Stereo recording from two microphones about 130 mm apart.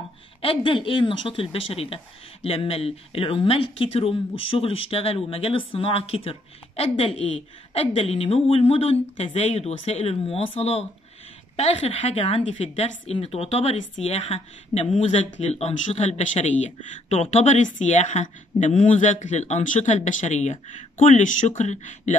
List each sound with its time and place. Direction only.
0.4 s speech: 40° left (ahead or behind); by 22.1 s 65° left (ahead or behind)